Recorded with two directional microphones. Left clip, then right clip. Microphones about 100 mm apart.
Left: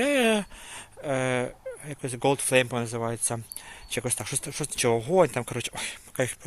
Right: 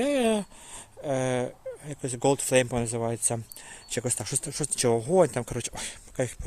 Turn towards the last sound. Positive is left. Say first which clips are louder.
# left 2 dB
turn(degrees=-30)  # may be behind; listen again after turning